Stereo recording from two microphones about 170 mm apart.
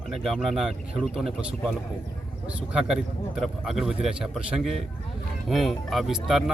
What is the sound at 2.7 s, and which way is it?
Speech, 5° right (ahead or behind).